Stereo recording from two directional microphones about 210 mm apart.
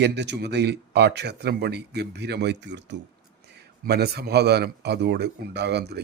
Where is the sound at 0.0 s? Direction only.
55° right (ahead or behind).